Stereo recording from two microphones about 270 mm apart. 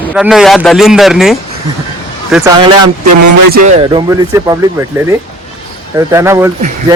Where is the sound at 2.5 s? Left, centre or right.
Centre.